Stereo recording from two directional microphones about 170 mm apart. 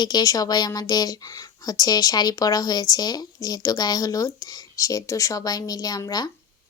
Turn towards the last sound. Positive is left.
turn(degrees=20)  # may be behind; listen again after turning